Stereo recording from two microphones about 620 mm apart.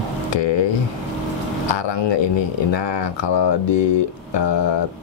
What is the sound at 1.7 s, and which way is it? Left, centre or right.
Speech, left.